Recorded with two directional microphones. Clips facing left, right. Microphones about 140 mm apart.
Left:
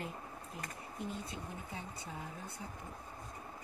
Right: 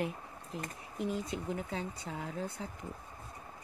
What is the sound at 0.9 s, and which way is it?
Speech, 90° right.